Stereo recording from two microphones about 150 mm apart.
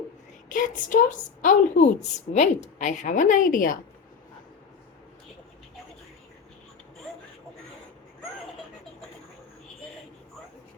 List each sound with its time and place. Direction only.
0.4 s a woman's voice: 60° left (ahead or behind)